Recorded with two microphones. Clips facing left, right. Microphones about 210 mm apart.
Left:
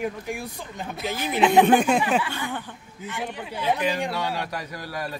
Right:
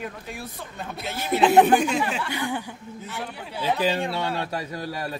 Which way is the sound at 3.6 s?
30° right (ahead or behind).